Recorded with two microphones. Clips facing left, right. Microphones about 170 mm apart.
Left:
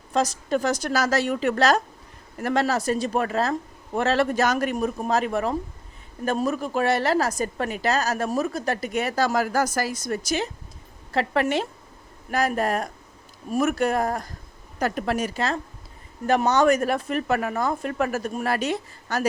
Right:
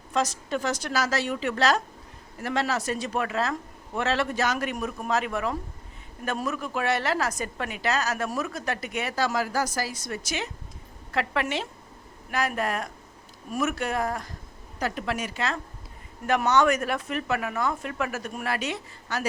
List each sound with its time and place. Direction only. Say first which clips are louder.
0.1 s a woman's voice: left 4 dB; 40° left (ahead or behind)
11.4 s a woman's voice: left 6 dB; 45° left (ahead or behind)